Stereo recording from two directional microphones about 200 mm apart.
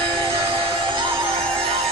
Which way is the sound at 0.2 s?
25° right (ahead or behind).